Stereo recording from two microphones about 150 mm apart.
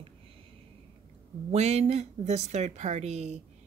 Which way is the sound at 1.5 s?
45° right (ahead or behind).